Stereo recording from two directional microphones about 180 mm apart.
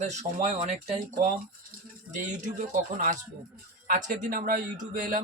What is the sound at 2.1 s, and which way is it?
Speech, 45° right (ahead or behind).